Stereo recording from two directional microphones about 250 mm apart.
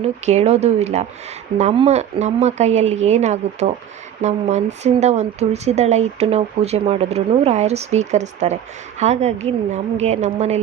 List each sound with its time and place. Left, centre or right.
0.0 s speech: right